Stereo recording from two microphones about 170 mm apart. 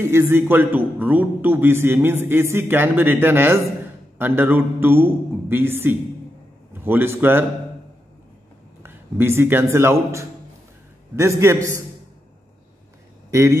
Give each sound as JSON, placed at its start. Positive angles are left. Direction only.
{"t": 0.0, "sound": "a man's voice", "side_deg": -15}
{"t": 8.8, "sound": "a man's voice", "side_deg": -15}
{"t": 13.3, "sound": "speech", "side_deg": -15}